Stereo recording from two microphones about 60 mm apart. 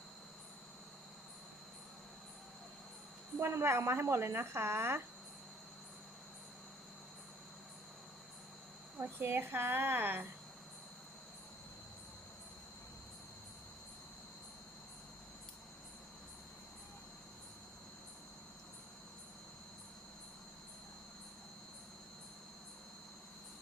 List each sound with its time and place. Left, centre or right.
3.3 s a woman's voice: right
9.0 s a woman's voice: right